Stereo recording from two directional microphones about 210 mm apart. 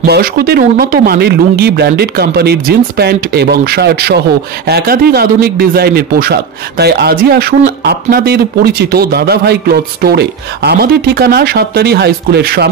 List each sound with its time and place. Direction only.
0.0 s speech: 50° right (ahead or behind)